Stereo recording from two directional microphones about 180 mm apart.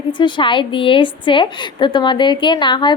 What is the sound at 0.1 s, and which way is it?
Speech, 25° left (ahead or behind).